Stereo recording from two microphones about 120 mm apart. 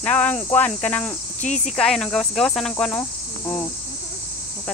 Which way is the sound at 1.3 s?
80° left.